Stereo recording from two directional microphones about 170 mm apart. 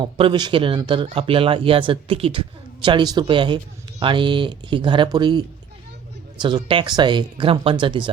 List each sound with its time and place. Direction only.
0.0 s speech: 30° right (ahead or behind)